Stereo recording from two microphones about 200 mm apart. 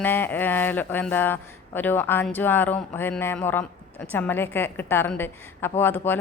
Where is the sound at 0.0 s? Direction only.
10° left (ahead or behind).